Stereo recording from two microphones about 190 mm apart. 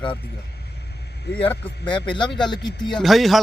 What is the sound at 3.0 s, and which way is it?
Speech, centre (ahead or behind).